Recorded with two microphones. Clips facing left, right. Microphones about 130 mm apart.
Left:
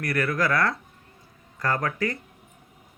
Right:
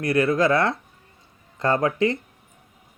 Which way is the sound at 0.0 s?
20° right (ahead or behind).